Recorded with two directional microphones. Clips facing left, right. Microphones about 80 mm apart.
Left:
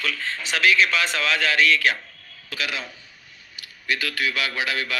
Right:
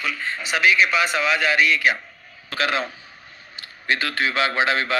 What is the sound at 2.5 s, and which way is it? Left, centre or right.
A man's voice, right.